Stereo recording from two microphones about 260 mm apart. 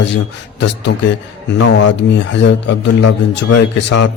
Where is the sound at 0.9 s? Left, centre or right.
Left.